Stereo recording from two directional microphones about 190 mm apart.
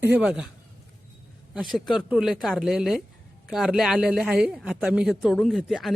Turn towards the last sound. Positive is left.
turn(degrees=0)  # may be behind; listen again after turning